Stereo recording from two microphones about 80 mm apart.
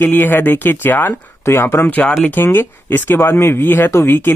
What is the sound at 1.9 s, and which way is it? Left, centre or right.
Speech, centre.